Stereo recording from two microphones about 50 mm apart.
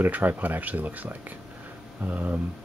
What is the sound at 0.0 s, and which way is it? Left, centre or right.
Speech, right.